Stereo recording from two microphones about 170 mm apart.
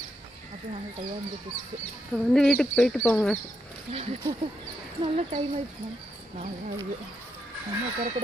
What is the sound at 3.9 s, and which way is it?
Speech, 35° right (ahead or behind).